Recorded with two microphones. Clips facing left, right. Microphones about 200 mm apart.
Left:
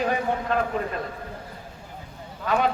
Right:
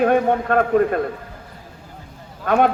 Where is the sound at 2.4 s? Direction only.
55° right (ahead or behind).